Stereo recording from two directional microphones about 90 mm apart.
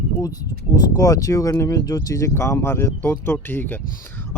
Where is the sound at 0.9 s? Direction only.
40° left (ahead or behind).